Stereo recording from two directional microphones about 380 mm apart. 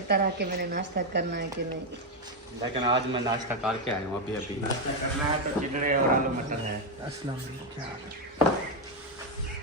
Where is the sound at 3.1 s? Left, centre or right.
Centre.